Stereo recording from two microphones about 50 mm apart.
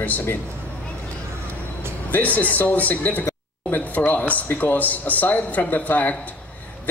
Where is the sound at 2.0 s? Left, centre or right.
Left.